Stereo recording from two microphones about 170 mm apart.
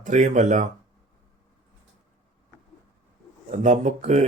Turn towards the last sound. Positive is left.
turn(degrees=-40)  # may be behind; listen again after turning